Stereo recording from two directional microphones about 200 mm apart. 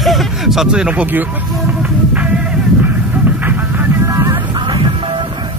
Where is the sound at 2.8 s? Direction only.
10° right (ahead or behind).